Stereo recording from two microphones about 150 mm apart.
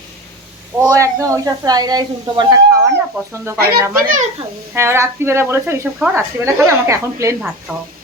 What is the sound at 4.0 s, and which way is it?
Speech, 60° right (ahead or behind).